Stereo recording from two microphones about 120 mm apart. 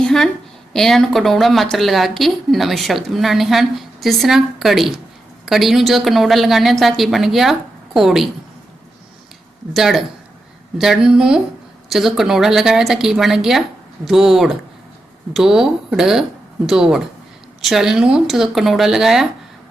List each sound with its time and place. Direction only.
0.0 s a sound: 5° left (ahead or behind)
0.7 s speech: 5° left (ahead or behind)
9.7 s speech: centre (ahead or behind)